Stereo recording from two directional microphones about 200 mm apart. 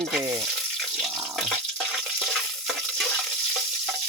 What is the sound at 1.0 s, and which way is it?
Water tap, centre (ahead or behind).